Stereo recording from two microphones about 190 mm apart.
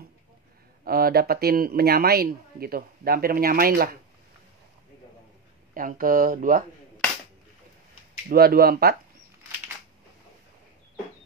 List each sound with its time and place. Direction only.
0.8 s speech: 50° right (ahead or behind)
5.8 s speech: 45° right (ahead or behind)
8.3 s speech: 50° right (ahead or behind)